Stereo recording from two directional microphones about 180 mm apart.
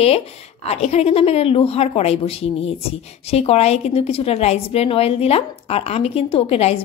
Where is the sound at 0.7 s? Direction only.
35° left (ahead or behind).